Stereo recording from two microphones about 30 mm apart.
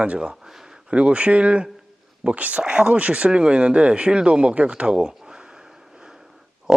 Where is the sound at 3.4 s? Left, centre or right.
Right.